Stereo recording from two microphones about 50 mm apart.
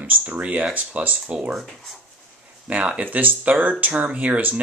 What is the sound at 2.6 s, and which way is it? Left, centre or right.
Speech, right.